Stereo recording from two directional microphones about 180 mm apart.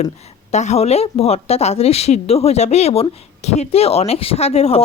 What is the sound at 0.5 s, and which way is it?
Speech, 40° left (ahead or behind).